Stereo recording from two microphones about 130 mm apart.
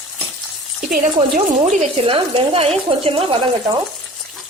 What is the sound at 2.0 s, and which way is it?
Speech, 45° right (ahead or behind).